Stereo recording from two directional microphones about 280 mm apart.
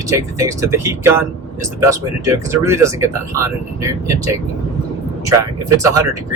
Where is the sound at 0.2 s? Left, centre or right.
Centre.